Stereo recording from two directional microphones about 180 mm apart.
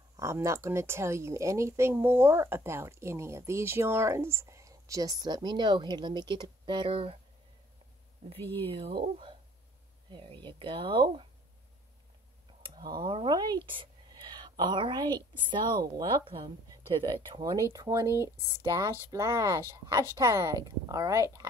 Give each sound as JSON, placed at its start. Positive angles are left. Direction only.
{"t": 0.2, "sound": "speech", "side_deg": -15}
{"t": 8.4, "sound": "speech", "side_deg": 10}
{"t": 8.6, "sound": "a woman's voice", "side_deg": -30}
{"t": 12.6, "sound": "speech", "side_deg": -25}
{"t": 13.7, "sound": "a sound", "side_deg": -25}
{"t": 15.5, "sound": "a woman's voice", "side_deg": -25}